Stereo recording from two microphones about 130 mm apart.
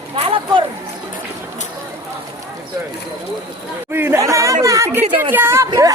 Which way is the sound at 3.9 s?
20° right (ahead or behind).